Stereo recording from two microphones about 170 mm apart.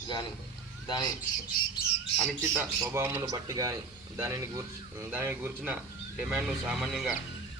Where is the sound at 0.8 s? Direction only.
20° left (ahead or behind).